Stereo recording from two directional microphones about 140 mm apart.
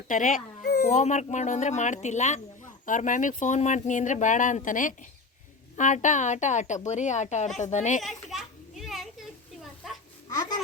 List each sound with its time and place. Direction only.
0.1 s speech: 70° left (ahead or behind)
0.9 s a woman's voice: 55° left (ahead or behind)
8.0 s children playing: centre (ahead or behind)